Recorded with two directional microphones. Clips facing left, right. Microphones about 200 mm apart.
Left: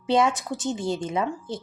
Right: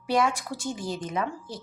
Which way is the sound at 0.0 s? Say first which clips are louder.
Left 3 dB; 25° left (ahead or behind).